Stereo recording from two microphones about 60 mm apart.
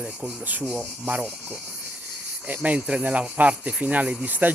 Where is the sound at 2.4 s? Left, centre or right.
Right.